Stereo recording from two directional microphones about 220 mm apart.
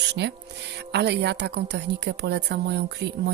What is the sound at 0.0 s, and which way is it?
A woman's voice, 50° right (ahead or behind).